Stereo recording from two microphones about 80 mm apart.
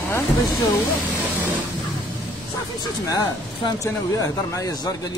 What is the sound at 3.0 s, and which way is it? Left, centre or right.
Speech, left.